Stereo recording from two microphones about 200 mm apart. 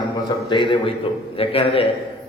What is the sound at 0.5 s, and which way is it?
A man's voice, 25° left (ahead or behind).